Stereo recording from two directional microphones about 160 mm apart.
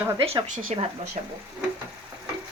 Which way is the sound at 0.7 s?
45° right (ahead or behind).